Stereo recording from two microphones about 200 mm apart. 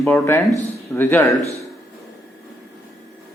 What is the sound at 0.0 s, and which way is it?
Speech, 10° left (ahead or behind).